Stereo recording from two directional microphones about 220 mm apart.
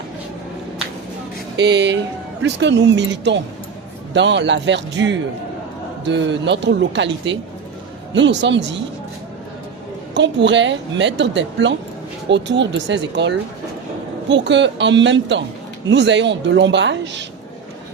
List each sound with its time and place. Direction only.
1.5 s a woman's voice: 50° right (ahead or behind)
10.2 s a woman's voice: 55° right (ahead or behind)